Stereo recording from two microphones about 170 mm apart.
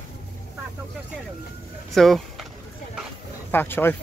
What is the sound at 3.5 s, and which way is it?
Speech, 10° left (ahead or behind).